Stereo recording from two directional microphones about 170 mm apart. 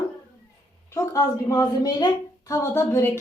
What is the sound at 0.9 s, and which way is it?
A woman's voice, 20° left (ahead or behind).